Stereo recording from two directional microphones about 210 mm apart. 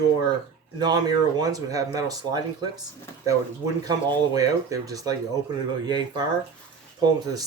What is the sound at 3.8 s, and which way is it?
Speech, 15° right (ahead or behind).